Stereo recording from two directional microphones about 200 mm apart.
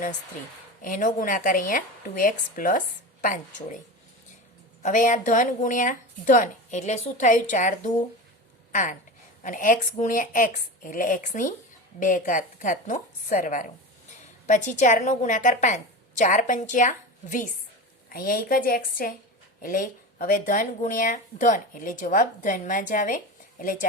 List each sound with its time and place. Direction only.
0.8 s speech: 40° left (ahead or behind)
4.8 s speech: 40° left (ahead or behind)